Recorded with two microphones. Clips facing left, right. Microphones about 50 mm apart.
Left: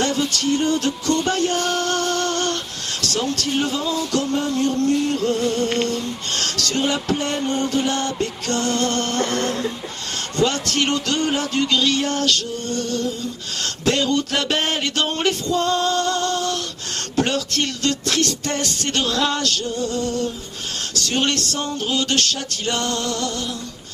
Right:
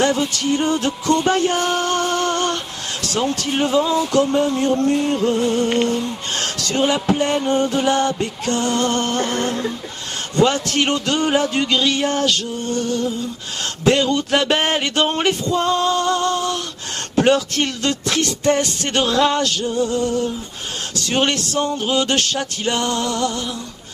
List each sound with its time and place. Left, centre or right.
0.0 s music: centre
13.8 s music: centre